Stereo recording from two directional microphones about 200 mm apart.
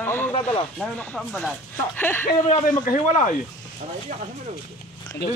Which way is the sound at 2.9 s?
35° left (ahead or behind).